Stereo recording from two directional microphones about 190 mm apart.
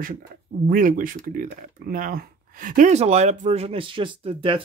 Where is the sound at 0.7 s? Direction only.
45° right (ahead or behind).